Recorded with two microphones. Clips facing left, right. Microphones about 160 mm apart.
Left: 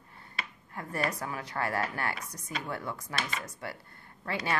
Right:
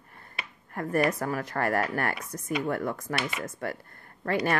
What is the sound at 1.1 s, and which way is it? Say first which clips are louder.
Speech: right 6 dB; 50° right (ahead or behind).